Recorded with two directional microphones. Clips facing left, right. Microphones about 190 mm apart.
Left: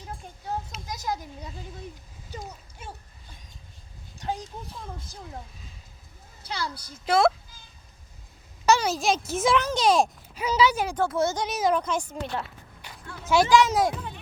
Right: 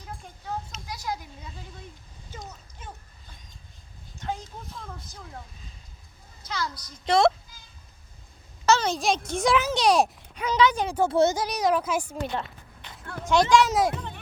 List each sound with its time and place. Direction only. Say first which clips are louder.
0.9 s a child's voice: left 2 dB; 45° left (ahead or behind)
4.2 s a sound: left 1 dB; 35° left (ahead or behind)
6.4 s a woman's voice: right 1 dB; 30° left (ahead or behind)
7.0 s a child's voice: right 1 dB; 5° left (ahead or behind)
8.6 s a child's voice: even; 10° left (ahead or behind)
11.1 s speech: right 4 dB; 25° right (ahead or behind)
11.3 s a woman's voice: even; centre (ahead or behind)